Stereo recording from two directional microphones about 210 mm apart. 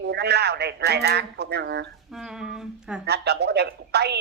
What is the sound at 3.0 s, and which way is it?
Speech, 50° right (ahead or behind).